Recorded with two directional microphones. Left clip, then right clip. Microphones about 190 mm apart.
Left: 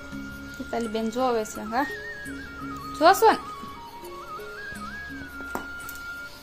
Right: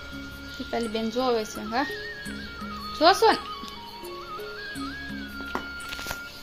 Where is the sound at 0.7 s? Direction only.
15° left (ahead or behind).